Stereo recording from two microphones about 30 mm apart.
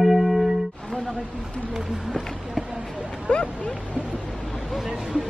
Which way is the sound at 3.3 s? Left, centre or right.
Left.